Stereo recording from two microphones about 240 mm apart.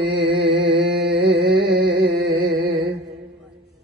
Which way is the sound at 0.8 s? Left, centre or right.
Right.